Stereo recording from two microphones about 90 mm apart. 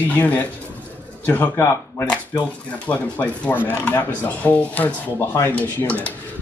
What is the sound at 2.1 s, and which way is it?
Speech, 15° left (ahead or behind).